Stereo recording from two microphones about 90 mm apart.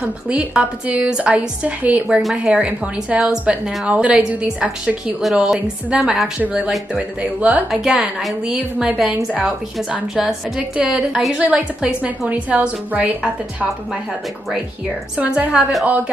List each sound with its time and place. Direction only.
0.3 s a woman's voice: 15° right (ahead or behind)
7.8 s a woman's voice: 5° right (ahead or behind)
15.1 s a woman's voice: 10° right (ahead or behind)